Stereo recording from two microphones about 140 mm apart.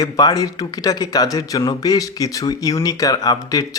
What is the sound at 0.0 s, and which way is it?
Speech, 25° left (ahead or behind).